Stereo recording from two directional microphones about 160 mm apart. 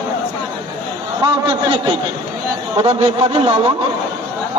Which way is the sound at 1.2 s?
30° right (ahead or behind).